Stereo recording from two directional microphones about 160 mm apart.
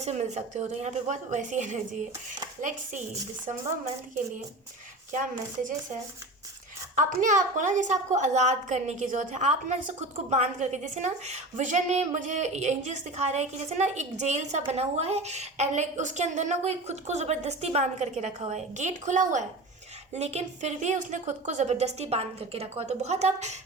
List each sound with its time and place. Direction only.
0.0 s a woman's voice: 45° right (ahead or behind)
5.1 s a woman's voice: 55° right (ahead or behind)